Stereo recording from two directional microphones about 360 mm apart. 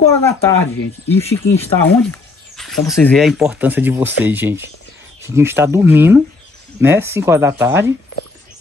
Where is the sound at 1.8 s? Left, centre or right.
Centre.